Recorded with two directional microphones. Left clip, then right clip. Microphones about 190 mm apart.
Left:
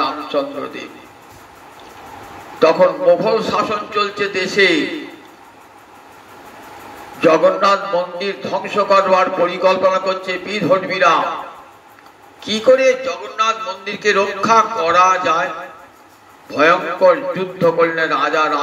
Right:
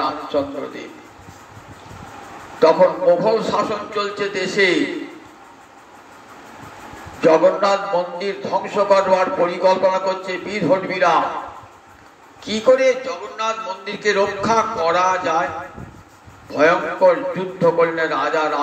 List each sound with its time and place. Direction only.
0.0 s a man's voice: 40° left (ahead or behind)
2.6 s a man's voice: 45° left (ahead or behind)
7.2 s a man's voice: 45° left (ahead or behind)
12.4 s a man's voice: 45° left (ahead or behind)